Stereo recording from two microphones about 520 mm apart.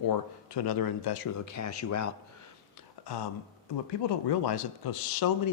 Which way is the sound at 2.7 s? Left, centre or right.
Left.